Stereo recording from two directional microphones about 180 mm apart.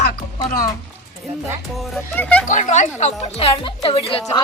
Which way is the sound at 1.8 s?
Centre (ahead or behind).